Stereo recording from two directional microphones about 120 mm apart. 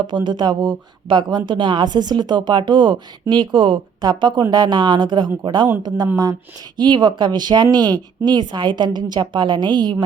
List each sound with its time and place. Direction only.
0.3 s a woman's voice: 40° right (ahead or behind)